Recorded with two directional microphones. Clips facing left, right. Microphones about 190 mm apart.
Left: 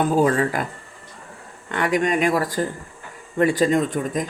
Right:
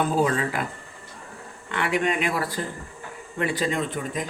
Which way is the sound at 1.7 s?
40° left (ahead or behind).